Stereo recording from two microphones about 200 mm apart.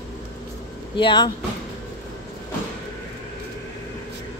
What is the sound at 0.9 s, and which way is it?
Speech, 20° left (ahead or behind).